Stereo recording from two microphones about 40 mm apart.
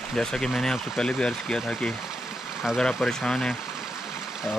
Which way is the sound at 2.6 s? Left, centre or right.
Centre.